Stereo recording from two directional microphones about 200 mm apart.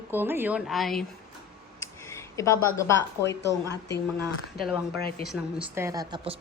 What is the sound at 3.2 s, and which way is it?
A woman's voice, 60° left (ahead or behind).